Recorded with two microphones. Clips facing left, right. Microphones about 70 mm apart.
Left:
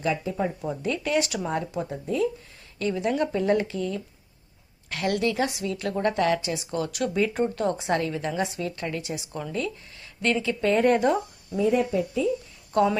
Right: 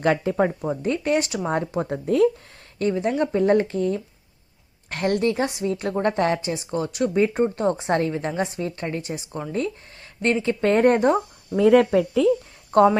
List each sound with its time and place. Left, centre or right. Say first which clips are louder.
0.0 s speech: right 6 dB; right
0.6 s a woman's voice: right 4 dB; right
2.7 s a woman's voice: right 3 dB; right
11.5 s speech: right 7 dB; right
12.7 s a woman's voice: right 6 dB; right